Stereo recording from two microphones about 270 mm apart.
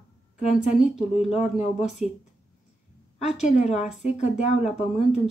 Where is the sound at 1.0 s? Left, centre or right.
Left.